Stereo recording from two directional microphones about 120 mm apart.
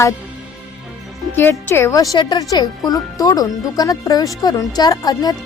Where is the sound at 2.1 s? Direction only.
35° left (ahead or behind).